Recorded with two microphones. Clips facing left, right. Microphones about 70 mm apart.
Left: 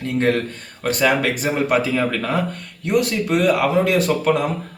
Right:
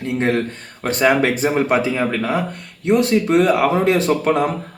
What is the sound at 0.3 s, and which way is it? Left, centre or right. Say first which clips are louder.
A man's voice: right 3 dB; right.